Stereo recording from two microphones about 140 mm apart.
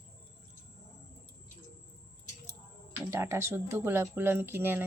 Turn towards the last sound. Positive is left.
turn(degrees=-15)  # may be behind; listen again after turning